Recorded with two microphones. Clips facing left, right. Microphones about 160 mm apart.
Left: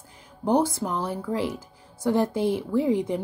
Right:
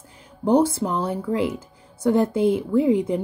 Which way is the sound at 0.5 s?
25° right (ahead or behind).